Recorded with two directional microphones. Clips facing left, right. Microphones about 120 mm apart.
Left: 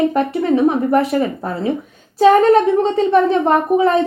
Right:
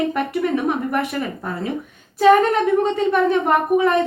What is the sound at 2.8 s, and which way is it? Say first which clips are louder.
A woman's voice: left 4 dB; 30° left (ahead or behind).